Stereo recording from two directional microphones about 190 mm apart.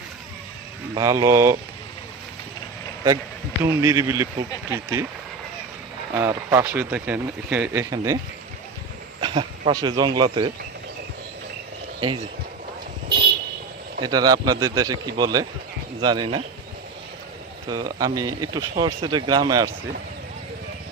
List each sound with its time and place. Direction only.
0.9 s speech: 15° right (ahead or behind)
3.6 s speech: 15° right (ahead or behind)
6.1 s speech: 10° right (ahead or behind)
9.2 s speech: 25° right (ahead or behind)
11.9 s speech: 25° right (ahead or behind)
14.0 s speech: 20° right (ahead or behind)
17.7 s speech: 20° right (ahead or behind)